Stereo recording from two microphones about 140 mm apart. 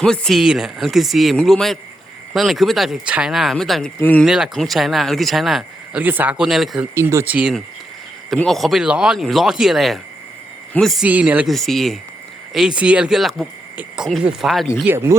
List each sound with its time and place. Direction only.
0.0 s speech: 5° left (ahead or behind)
4.3 s speech: centre (ahead or behind)
6.0 s speech: 10° right (ahead or behind)
6.9 s speech: 20° right (ahead or behind)
7.3 s speech: 5° right (ahead or behind)
11.0 s speech: 10° right (ahead or behind)
11.4 s speech: centre (ahead or behind)
14.8 s speech: 20° right (ahead or behind)